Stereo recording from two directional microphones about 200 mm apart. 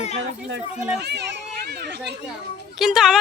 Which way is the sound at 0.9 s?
55° right (ahead or behind).